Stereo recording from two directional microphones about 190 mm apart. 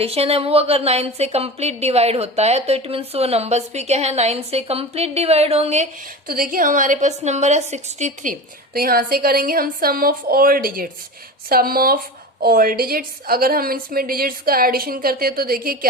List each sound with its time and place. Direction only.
0.0 s speech: 30° right (ahead or behind)
6.2 s a woman's voice: 50° right (ahead or behind)